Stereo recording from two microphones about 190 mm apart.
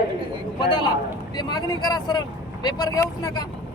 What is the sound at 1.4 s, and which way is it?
Speech, 20° left (ahead or behind).